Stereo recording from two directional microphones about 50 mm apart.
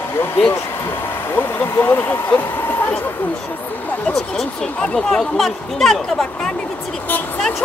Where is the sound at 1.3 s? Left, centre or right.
Left.